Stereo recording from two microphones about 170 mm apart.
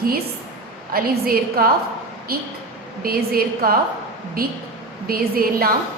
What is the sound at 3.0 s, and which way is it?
Speech, 60° right (ahead or behind).